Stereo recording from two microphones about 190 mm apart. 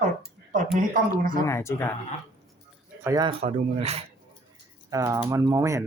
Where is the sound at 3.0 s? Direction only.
20° right (ahead or behind).